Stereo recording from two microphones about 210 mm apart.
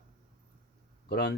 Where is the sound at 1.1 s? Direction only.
50° left (ahead or behind).